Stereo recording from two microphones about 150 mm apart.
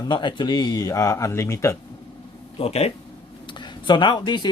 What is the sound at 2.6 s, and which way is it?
Speech, 45° left (ahead or behind).